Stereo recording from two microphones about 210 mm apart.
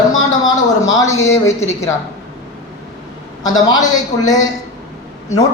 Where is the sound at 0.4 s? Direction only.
15° left (ahead or behind).